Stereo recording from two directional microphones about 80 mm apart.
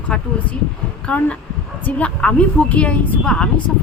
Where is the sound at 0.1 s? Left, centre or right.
Centre.